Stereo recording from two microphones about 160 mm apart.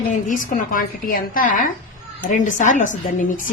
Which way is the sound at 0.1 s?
50° left (ahead or behind).